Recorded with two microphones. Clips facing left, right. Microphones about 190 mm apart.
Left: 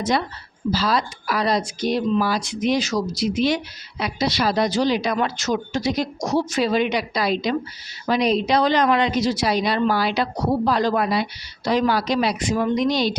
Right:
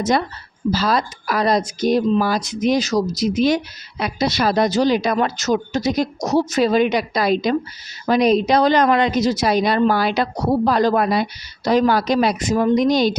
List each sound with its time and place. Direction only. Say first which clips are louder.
0.7 s a woman's voice: right 2 dB; 45° right (ahead or behind)